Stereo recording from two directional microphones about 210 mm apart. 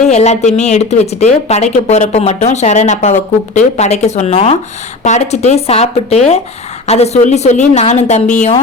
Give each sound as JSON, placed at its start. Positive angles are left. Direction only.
{"t": 0.1, "sound": "speech", "side_deg": 30}